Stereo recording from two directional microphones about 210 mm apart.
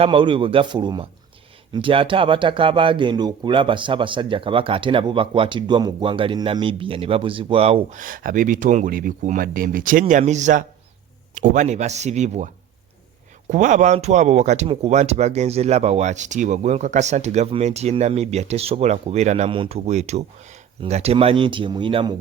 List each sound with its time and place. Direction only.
0.0 s speech: 25° right (ahead or behind)
13.5 s speech: 35° right (ahead or behind)